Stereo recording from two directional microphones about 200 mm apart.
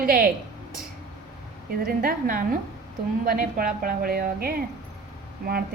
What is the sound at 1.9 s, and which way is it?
A woman's voice, 45° right (ahead or behind).